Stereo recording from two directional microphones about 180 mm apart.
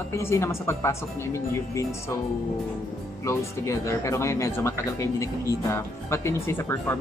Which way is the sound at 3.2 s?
15° left (ahead or behind).